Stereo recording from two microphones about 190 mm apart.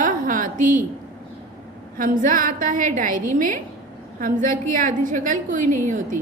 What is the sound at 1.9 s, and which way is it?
A woman's voice, 45° right (ahead or behind).